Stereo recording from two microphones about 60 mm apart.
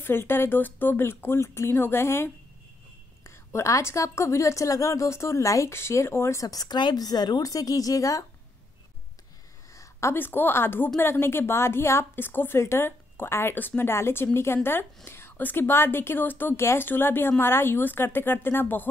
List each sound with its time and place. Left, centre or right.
0.0 s speech: left
3.3 s a woman's voice: left
5.7 s a woman's voice: left
6.4 s speech: left
9.8 s a sound: left
10.1 s a woman's voice: left